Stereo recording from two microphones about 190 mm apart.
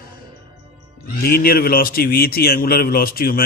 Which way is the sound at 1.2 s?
50° left (ahead or behind).